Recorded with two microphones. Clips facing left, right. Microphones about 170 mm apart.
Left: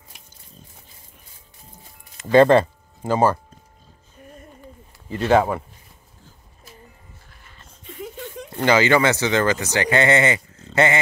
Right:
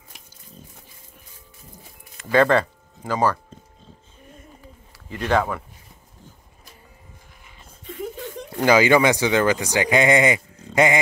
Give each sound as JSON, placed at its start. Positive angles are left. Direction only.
{"t": 2.3, "sound": "speech", "side_deg": 25}
{"t": 5.3, "sound": "speech", "side_deg": 30}
{"t": 8.5, "sound": "speech", "side_deg": -10}